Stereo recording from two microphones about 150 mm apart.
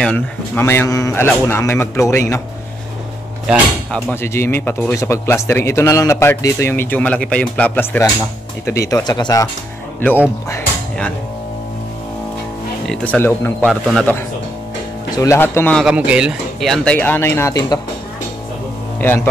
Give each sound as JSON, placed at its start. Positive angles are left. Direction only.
{"t": 0.0, "sound": "speech", "side_deg": 10}
{"t": 4.1, "sound": "speech", "side_deg": 15}
{"t": 12.8, "sound": "speech", "side_deg": 5}
{"t": 13.7, "sound": "speech", "side_deg": 0}
{"t": 15.0, "sound": "speech", "side_deg": 20}
{"t": 15.8, "sound": "speech", "side_deg": -5}
{"t": 18.9, "sound": "speech", "side_deg": 15}